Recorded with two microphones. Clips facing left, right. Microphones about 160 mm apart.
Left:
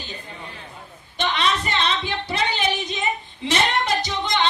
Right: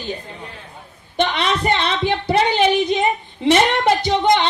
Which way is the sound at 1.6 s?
55° right (ahead or behind).